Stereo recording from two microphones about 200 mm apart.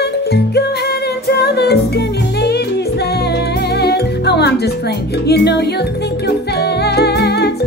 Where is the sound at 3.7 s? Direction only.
55° left (ahead or behind).